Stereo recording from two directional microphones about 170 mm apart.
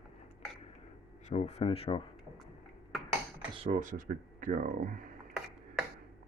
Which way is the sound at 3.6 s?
50° right (ahead or behind).